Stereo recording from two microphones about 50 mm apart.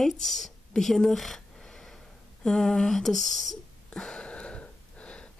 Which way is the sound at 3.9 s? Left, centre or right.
Centre.